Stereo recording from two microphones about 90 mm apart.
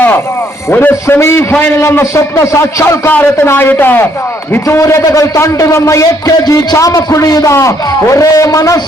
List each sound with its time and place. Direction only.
0.7 s a man's voice: 20° left (ahead or behind)
3.1 s a man's voice: 25° left (ahead or behind); by 8.8 s 40° left (ahead or behind)